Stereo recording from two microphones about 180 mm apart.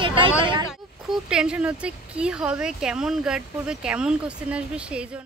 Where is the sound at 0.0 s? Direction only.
30° right (ahead or behind).